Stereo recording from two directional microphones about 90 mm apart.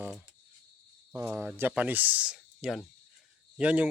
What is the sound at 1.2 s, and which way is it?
Speech, 25° right (ahead or behind).